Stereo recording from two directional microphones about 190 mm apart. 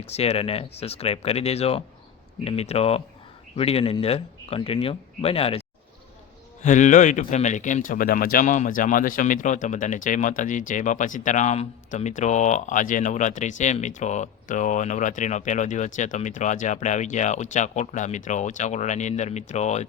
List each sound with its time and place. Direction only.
0.0 s speech: 35° left (ahead or behind)
6.6 s speech: 40° left (ahead or behind)